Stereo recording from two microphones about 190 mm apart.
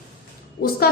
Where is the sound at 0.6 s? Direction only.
50° left (ahead or behind).